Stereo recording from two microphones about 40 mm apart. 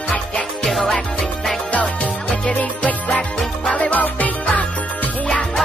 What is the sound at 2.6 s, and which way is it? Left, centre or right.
Music, left.